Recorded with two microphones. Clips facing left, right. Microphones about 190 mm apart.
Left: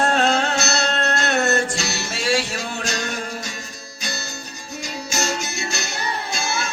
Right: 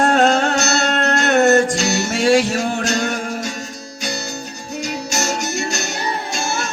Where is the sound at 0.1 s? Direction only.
45° right (ahead or behind).